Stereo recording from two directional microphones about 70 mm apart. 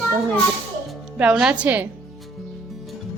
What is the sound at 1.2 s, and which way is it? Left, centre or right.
Speech, centre.